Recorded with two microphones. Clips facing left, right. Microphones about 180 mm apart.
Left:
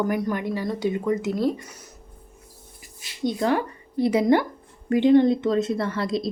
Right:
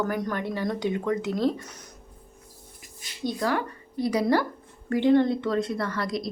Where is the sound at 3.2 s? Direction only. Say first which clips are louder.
Left 4 dB; 25° left (ahead or behind).